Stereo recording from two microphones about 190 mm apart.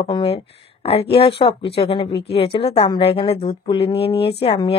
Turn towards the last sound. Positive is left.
turn(degrees=30)  # may be behind; listen again after turning